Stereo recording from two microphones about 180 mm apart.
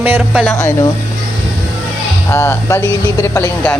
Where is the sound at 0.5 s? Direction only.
15° left (ahead or behind).